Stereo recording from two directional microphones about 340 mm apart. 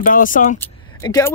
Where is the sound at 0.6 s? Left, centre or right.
Centre.